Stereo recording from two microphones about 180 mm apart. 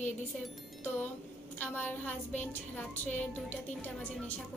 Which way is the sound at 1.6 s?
10° left (ahead or behind).